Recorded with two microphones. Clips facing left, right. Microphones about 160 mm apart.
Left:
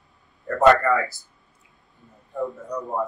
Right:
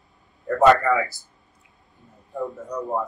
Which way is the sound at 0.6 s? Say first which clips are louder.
Even; centre (ahead or behind).